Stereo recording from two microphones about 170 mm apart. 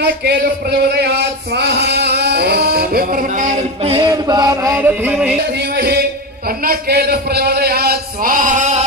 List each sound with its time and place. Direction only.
0.0 s speech: 70° right (ahead or behind); by 3.9 s 50° right (ahead or behind)
3.9 s a sound: 25° right (ahead or behind); by 5.3 s 10° right (ahead or behind)
6.6 s a man's voice: 65° right (ahead or behind); by 8.8 s 45° right (ahead or behind)